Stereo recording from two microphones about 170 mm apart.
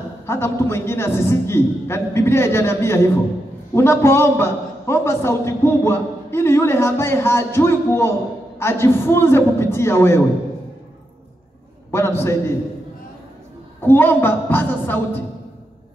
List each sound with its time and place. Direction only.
0.3 s a man's voice: 15° left (ahead or behind)
11.9 s a man's voice: 15° left (ahead or behind)
13.8 s a man's voice: 10° left (ahead or behind)